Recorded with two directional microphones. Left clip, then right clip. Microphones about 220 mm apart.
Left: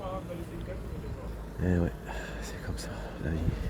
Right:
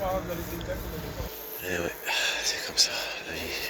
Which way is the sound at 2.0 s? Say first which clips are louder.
Right 13 dB; 5° right (ahead or behind).